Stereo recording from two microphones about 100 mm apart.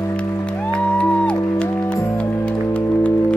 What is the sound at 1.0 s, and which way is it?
Music, 15° left (ahead or behind).